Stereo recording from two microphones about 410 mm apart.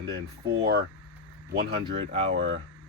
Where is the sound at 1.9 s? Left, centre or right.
Centre.